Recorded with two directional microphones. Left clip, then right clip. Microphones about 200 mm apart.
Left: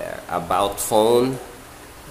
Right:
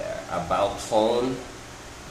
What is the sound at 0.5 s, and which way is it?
Speech, 55° left (ahead or behind).